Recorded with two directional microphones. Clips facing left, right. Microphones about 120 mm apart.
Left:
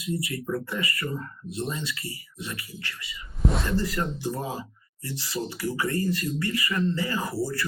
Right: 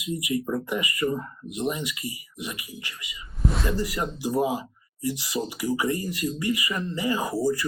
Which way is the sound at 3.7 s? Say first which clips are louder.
Left 1 dB; 15° right (ahead or behind).